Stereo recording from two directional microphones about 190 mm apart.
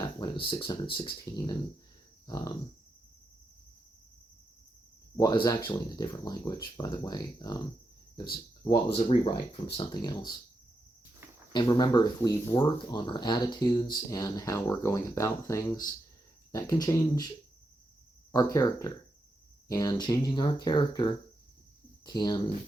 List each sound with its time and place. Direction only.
0.0 s speech: 25° left (ahead or behind)
2.2 s a sound: 20° left (ahead or behind)
5.1 s speech: 20° left (ahead or behind)
11.5 s speech: 20° left (ahead or behind)